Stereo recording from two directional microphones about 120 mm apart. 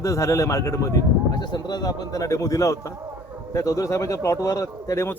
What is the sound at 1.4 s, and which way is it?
A man's voice, 35° left (ahead or behind).